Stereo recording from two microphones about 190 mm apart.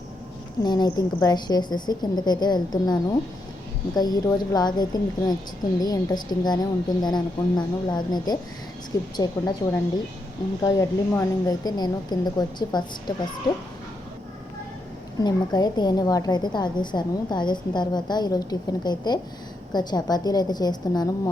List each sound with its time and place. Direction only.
0.6 s a woman's voice: 20° left (ahead or behind)
15.2 s a woman's voice: 20° left (ahead or behind)